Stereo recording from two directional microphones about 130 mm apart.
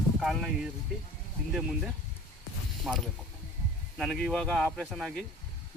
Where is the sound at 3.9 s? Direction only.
5° right (ahead or behind).